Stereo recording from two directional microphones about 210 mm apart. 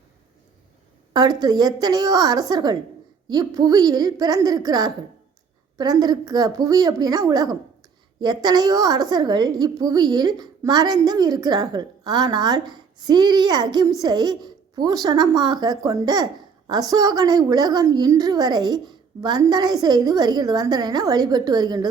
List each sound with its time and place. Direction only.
1.1 s a woman's voice: 20° right (ahead or behind)